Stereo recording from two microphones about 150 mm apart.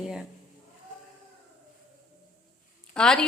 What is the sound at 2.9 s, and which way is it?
Speech, 5° left (ahead or behind).